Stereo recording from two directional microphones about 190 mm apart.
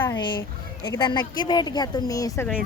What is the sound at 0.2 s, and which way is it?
Speech, 25° left (ahead or behind).